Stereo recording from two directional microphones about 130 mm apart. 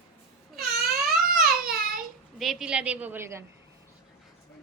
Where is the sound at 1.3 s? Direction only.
90° right.